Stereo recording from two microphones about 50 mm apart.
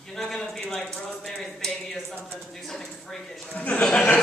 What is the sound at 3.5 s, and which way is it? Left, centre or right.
Speech, left.